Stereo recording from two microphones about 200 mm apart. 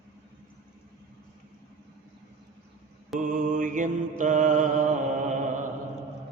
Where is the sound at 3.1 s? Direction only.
40° right (ahead or behind).